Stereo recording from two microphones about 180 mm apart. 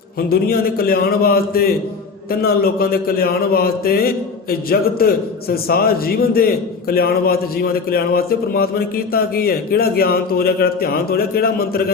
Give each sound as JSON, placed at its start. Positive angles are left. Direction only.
{"t": 0.3, "sound": "a man's voice", "side_deg": 55}